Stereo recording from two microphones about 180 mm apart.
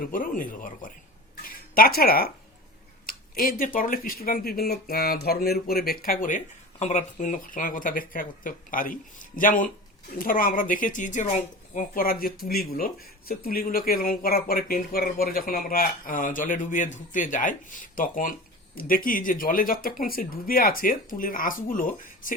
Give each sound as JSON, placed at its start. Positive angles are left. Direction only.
{"t": 0.1, "sound": "speech", "side_deg": 50}
{"t": 3.1, "sound": "a sound", "side_deg": 50}
{"t": 3.8, "sound": "speech", "side_deg": 50}